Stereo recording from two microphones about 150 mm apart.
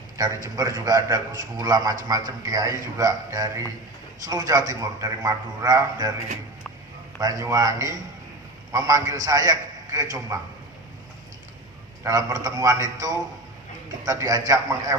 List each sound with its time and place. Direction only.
0.4 s a man's voice: 25° right (ahead or behind)
7.2 s a man's voice: 25° right (ahead or behind)
12.0 s a man's voice: 25° right (ahead or behind)